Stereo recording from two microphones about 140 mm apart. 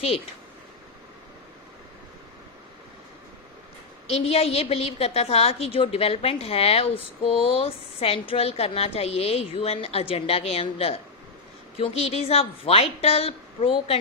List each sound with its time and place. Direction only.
4.1 s a woman's voice: 45° left (ahead or behind)